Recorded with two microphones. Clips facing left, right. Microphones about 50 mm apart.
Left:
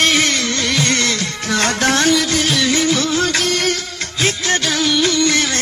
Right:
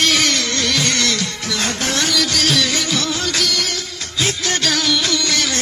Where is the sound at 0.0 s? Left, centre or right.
Left.